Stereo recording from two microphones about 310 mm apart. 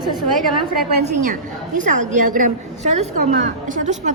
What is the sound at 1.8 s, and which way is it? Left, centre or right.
A woman's voice, right.